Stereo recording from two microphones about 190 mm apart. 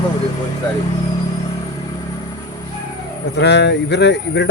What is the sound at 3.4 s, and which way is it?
Speech, 65° left (ahead or behind).